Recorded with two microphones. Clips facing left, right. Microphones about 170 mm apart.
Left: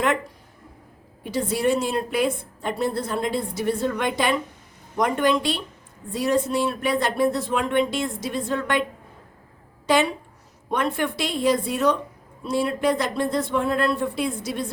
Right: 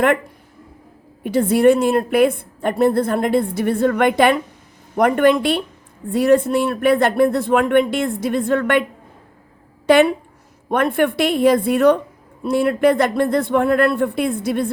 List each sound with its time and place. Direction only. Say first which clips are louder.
1.2 s a woman's voice: right 9 dB; 55° right (ahead or behind)
9.8 s a woman's voice: right 8 dB; 60° right (ahead or behind)